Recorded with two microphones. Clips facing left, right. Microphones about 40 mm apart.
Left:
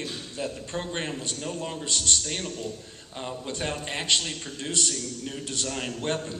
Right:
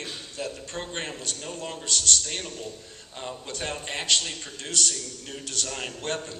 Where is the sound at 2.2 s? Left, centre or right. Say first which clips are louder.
Left 2 dB; centre.